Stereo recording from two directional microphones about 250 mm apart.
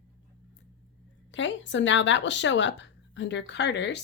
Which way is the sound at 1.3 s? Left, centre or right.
Left.